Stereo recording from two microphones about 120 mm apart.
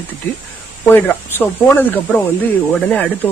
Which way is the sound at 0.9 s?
15° left (ahead or behind).